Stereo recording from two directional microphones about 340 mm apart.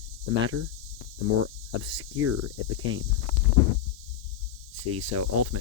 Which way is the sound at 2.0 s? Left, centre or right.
Right.